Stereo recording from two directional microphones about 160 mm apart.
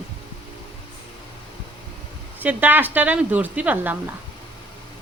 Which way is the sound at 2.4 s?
10° right (ahead or behind).